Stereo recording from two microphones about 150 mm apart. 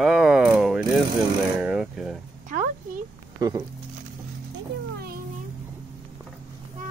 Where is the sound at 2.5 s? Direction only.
60° right (ahead or behind).